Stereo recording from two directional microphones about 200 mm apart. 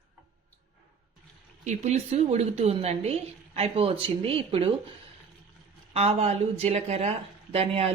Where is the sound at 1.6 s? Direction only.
35° right (ahead or behind).